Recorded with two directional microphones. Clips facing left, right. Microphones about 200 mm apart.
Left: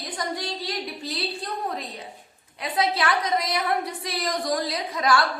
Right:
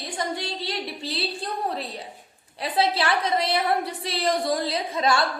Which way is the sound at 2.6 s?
30° right (ahead or behind).